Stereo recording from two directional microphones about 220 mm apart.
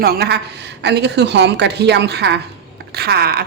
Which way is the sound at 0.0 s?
45° right (ahead or behind).